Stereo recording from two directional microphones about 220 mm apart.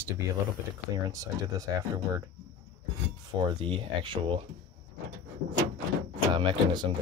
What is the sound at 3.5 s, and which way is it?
Speech, 25° right (ahead or behind).